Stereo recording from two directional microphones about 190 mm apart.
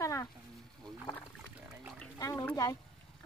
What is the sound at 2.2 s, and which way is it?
Speech, 20° left (ahead or behind).